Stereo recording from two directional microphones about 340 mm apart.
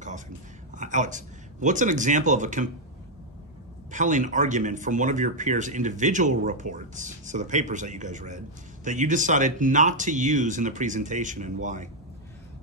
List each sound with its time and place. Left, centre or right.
0.7 s speech: right
3.9 s speech: right